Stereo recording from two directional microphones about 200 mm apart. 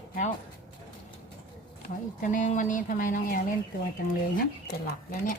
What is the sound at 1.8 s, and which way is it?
Speech, 40° left (ahead or behind).